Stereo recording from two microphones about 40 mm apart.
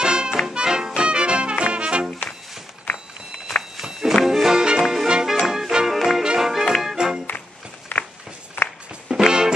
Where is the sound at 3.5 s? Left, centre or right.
Centre.